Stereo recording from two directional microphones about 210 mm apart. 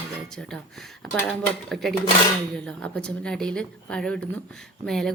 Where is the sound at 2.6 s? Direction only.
5° left (ahead or behind).